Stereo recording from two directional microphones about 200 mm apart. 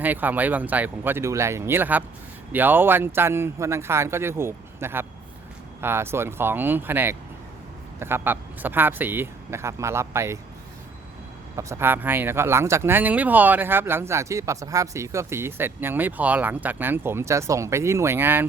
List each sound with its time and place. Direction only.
0.0 s speech: 10° right (ahead or behind)
11.5 s speech: 10° right (ahead or behind)